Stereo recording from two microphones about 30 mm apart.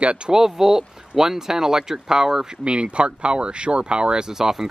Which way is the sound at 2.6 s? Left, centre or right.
Right.